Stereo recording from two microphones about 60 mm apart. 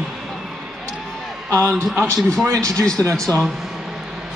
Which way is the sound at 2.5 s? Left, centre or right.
Right.